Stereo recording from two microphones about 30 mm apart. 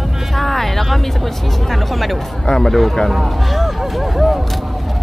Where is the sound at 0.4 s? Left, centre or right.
Centre.